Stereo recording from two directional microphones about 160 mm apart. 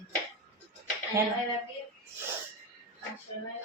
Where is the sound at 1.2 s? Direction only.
20° right (ahead or behind).